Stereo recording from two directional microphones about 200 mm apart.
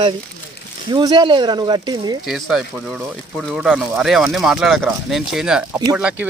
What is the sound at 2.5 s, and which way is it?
Speech, centre (ahead or behind).